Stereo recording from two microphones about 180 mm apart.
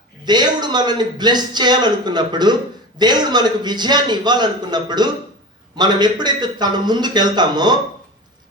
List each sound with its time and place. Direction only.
0.3 s a man's voice: 25° right (ahead or behind)